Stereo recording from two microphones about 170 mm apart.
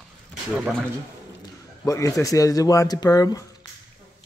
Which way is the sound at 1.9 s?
20° left (ahead or behind).